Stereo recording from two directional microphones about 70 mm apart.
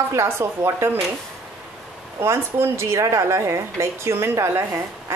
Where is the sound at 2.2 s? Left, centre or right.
Right.